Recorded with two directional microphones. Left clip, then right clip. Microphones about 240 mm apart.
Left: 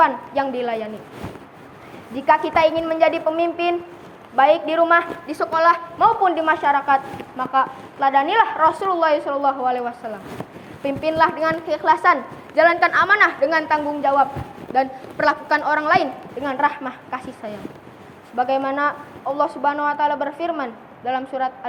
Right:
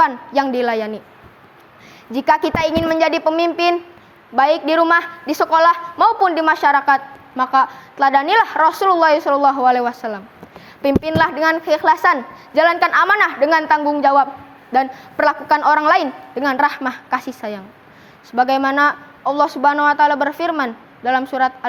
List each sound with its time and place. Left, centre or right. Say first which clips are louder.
0.0 s a woman's voice: right 2 dB; right
2.1 s a woman's voice: right 1 dB; right